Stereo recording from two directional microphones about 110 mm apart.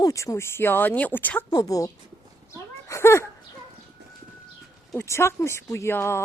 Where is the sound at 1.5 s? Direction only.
30° left (ahead or behind).